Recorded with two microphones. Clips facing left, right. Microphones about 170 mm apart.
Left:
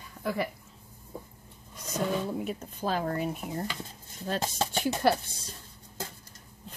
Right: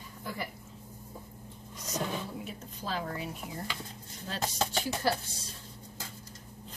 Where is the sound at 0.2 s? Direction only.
65° left (ahead or behind).